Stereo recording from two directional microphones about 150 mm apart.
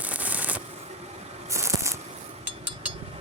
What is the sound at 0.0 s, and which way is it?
Rub, 10° right (ahead or behind).